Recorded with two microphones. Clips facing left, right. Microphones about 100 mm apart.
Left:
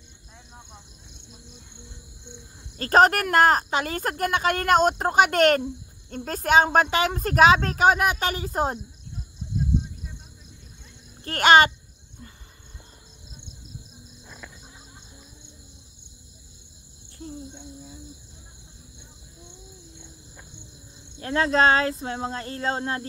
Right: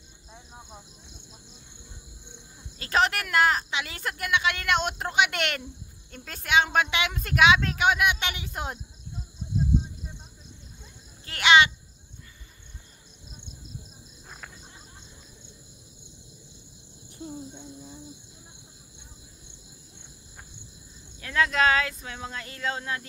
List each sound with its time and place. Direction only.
0.6 s a sound: 5° right (ahead or behind)
2.8 s a woman's voice: 45° left (ahead or behind)
11.2 s a woman's voice: 45° left (ahead or behind)
21.2 s speech: 35° left (ahead or behind)